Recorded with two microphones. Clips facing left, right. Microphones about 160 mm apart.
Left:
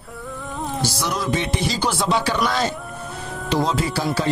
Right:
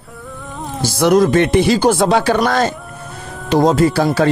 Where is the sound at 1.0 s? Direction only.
55° right (ahead or behind).